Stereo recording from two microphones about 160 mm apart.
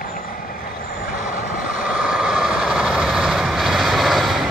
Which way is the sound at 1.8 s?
5° right (ahead or behind).